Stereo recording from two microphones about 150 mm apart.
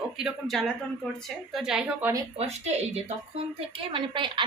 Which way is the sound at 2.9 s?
40° right (ahead or behind).